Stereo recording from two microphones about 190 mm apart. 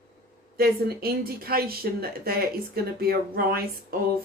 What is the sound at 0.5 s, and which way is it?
A woman's voice, 55° right (ahead or behind).